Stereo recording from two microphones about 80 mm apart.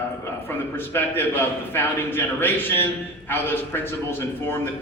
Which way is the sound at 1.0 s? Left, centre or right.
Left.